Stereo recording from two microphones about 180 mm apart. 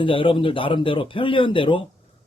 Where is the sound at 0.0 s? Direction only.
30° left (ahead or behind).